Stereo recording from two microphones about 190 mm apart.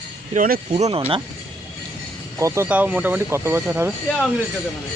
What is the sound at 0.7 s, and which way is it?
Speech, 35° right (ahead or behind).